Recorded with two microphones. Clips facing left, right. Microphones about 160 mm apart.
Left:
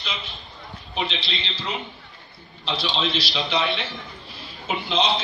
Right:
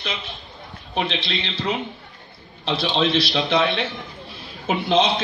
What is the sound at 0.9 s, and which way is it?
A man's voice, 55° right (ahead or behind).